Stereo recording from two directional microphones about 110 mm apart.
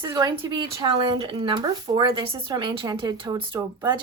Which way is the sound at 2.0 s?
60° right (ahead or behind).